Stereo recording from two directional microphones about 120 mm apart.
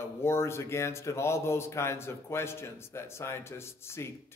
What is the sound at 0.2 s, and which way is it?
Speech, 20° left (ahead or behind).